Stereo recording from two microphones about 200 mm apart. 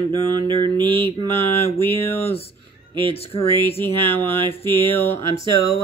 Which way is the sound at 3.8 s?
10° left (ahead or behind).